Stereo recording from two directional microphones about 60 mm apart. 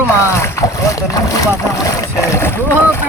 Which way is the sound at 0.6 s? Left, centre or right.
Left.